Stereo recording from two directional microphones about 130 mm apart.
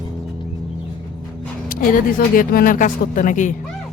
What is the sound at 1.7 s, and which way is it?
Speech, 90° left.